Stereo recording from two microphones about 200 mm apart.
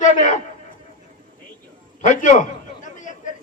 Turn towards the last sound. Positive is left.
turn(degrees=40)  # may be behind; listen again after turning